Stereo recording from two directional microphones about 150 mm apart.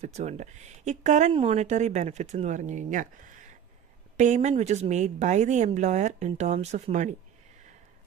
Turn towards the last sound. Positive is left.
turn(degrees=-50)  # may be behind; listen again after turning